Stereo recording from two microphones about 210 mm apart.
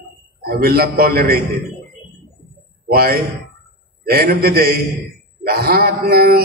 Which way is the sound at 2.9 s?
45° right (ahead or behind).